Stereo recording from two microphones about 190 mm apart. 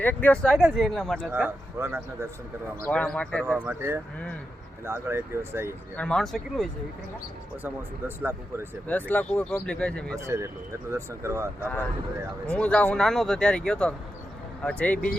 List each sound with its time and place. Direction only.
0.0 s speech: 10° left (ahead or behind)
1.3 s speech: 10° right (ahead or behind)
2.8 s speech: 5° left (ahead or behind)
3.4 s speech: 10° right (ahead or behind)
6.0 s speech: 5° left (ahead or behind)
7.6 s speech: 10° right (ahead or behind)
8.9 s speech: 10° left (ahead or behind)
10.2 s speech: 15° right (ahead or behind)
12.5 s speech: 5° left (ahead or behind)